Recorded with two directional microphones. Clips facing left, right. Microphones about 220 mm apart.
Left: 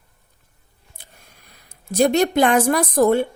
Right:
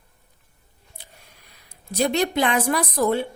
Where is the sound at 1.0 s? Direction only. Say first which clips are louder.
Right 1 dB; 50° left (ahead or behind).